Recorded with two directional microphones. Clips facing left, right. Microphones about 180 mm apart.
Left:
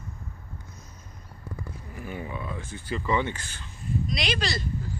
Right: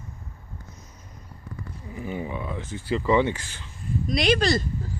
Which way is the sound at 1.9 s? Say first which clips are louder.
Right 5 dB; 20° right (ahead or behind).